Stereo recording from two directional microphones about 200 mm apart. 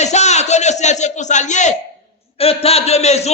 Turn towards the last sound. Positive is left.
turn(degrees=30)  # may be behind; listen again after turning